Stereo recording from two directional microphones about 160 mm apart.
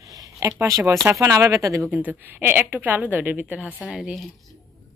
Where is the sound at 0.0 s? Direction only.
20° right (ahead or behind).